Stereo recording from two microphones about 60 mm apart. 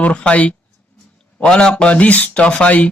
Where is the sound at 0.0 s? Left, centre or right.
Left.